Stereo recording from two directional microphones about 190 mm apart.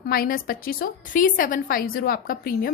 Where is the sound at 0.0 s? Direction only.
50° left (ahead or behind).